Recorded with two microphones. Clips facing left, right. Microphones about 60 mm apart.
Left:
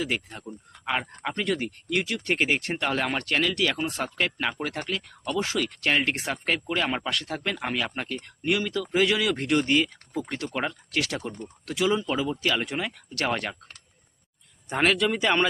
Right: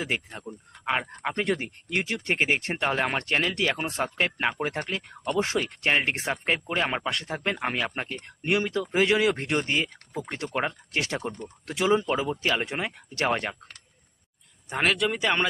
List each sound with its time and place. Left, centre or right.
0.0 s speech: right
14.7 s speech: centre